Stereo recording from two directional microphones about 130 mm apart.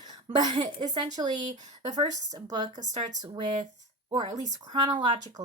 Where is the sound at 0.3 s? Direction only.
35° right (ahead or behind).